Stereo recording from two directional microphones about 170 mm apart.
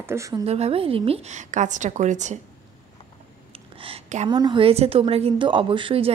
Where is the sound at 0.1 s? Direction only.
20° right (ahead or behind).